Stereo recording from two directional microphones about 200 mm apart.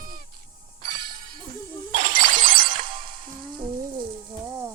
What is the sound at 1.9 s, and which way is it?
Music, 40° right (ahead or behind).